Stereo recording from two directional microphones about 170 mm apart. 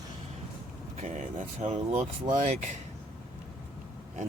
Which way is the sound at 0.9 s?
45° right (ahead or behind).